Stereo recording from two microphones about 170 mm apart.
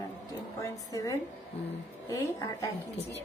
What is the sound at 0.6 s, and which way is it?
Female singing, 20° left (ahead or behind).